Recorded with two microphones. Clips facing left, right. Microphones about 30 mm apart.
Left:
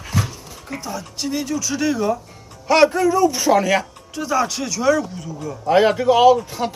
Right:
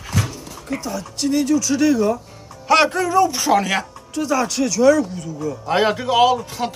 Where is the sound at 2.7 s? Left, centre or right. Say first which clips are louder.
Left 1 dB; centre.